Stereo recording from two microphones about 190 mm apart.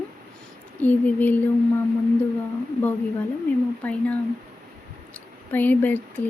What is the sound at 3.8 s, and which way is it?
Speech, 10° left (ahead or behind).